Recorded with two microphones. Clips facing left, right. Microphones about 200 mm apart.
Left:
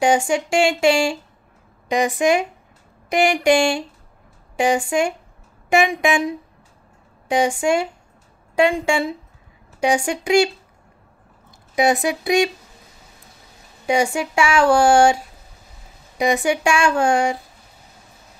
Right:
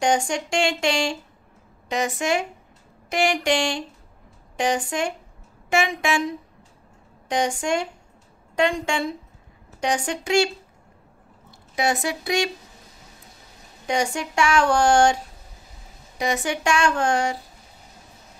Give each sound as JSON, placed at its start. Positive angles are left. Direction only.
{"t": 0.0, "sound": "speech", "side_deg": 5}
{"t": 11.7, "sound": "speech", "side_deg": 15}
{"t": 13.8, "sound": "speech", "side_deg": 10}
{"t": 16.2, "sound": "speech", "side_deg": 15}